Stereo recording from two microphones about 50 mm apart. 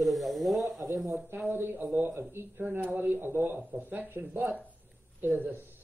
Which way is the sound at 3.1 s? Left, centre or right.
Right.